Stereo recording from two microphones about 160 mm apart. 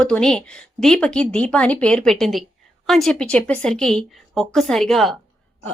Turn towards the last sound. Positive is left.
turn(degrees=0)  # may be behind; listen again after turning